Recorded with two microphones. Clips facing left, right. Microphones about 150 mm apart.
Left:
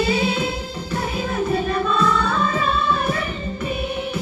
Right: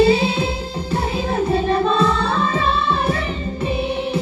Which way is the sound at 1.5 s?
30° right (ahead or behind).